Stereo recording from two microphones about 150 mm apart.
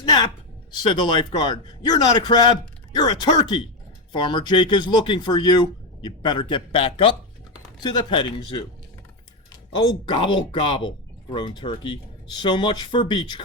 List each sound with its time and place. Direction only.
0.8 s a man's voice: 30° left (ahead or behind)
9.7 s a man's voice: 35° left (ahead or behind)